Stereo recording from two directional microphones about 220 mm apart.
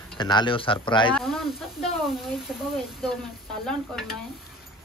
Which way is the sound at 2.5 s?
Centre (ahead or behind).